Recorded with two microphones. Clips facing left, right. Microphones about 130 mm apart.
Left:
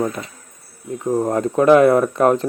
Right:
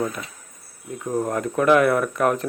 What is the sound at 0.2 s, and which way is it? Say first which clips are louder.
Speech: left 4 dB; 25° left (ahead or behind).